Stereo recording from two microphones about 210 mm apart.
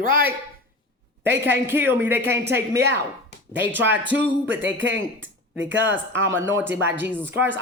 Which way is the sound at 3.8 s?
10° right (ahead or behind).